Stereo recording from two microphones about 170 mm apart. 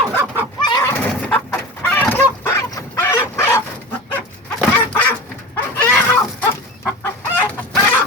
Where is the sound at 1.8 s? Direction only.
10° left (ahead or behind).